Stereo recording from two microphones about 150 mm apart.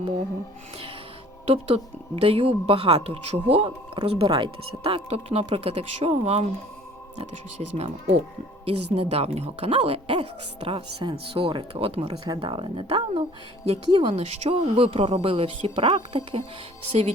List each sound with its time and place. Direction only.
1.5 s speech: 45° right (ahead or behind)
7.8 s speech: 45° right (ahead or behind)
11.0 s speech: 35° right (ahead or behind)